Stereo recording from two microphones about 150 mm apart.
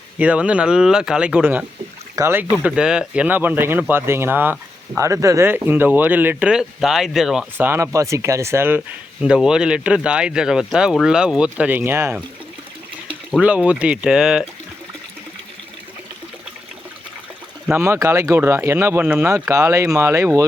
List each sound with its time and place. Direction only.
0.2 s speech: 10° right (ahead or behind)
7.6 s speech: 15° right (ahead or behind)
9.2 s speech: 5° right (ahead or behind)
13.3 s speech: 10° right (ahead or behind)
17.7 s speech: 15° right (ahead or behind)